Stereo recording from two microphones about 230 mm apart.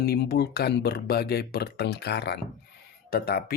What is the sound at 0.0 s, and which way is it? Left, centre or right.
Speech, left.